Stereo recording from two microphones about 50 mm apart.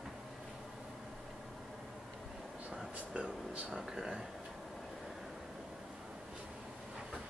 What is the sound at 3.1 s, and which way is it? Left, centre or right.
Speech, centre.